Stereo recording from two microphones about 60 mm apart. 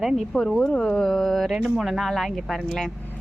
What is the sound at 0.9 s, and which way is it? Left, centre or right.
Speech, centre.